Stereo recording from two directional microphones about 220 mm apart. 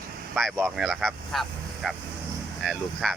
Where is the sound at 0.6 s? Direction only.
Centre (ahead or behind).